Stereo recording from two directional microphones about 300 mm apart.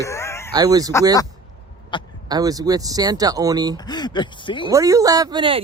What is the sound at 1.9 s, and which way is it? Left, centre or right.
Speech, centre.